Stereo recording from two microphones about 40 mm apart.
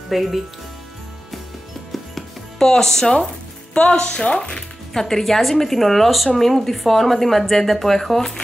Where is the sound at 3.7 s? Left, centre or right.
Left; by 8.3 s centre.